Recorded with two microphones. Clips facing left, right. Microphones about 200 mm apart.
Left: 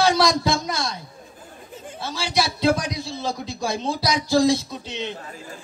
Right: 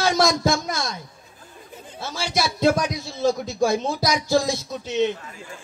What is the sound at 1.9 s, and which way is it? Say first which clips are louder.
A man's voice: left 1 dB; 50° right (ahead or behind).